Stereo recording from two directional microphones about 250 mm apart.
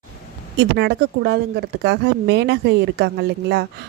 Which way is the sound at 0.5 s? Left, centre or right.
Right.